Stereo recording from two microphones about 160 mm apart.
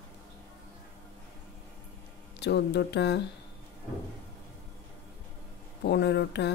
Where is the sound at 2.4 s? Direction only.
90° left.